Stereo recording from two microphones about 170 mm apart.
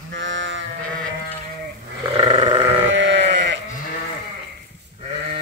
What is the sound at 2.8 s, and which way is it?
Sheep, 90° right.